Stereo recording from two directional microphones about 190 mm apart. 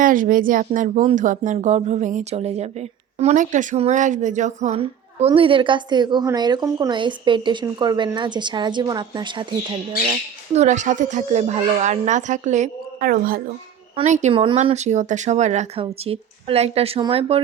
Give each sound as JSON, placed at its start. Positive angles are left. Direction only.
{"t": 0.0, "sound": "speech", "side_deg": -45}
{"t": 10.5, "sound": "speech", "side_deg": -40}
{"t": 13.9, "sound": "speech", "side_deg": -35}